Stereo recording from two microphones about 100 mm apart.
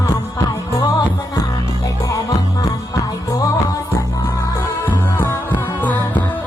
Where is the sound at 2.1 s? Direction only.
35° left (ahead or behind).